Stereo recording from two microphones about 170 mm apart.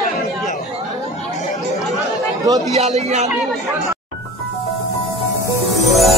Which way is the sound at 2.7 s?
40° right (ahead or behind).